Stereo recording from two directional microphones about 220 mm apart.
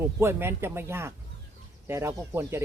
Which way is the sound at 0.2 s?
10° right (ahead or behind).